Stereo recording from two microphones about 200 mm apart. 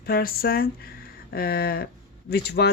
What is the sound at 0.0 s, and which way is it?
Speech, 50° left (ahead or behind).